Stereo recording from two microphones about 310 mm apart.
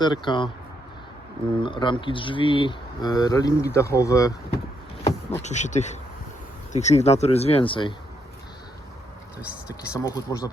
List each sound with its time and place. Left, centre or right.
0.0 s speech: centre
1.6 s speech: centre
5.4 s speech: left
9.4 s speech: centre
9.9 s speech: centre